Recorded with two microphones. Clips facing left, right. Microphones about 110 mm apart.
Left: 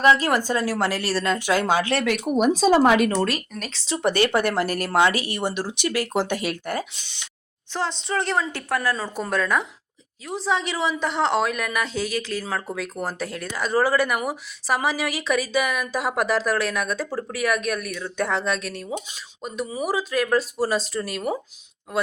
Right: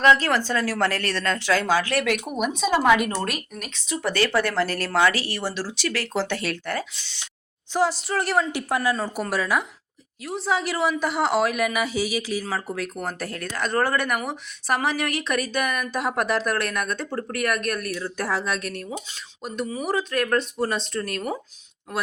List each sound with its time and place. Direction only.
0.0 s speech: 10° left (ahead or behind); by 3.9 s 30° left (ahead or behind)
4.0 s speech: 20° left (ahead or behind)
7.7 s speech: 10° right (ahead or behind)
8.5 s speech: 15° right (ahead or behind); by 21.3 s 5° left (ahead or behind)